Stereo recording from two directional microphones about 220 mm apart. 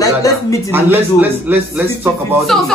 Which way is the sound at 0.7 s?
10° right (ahead or behind).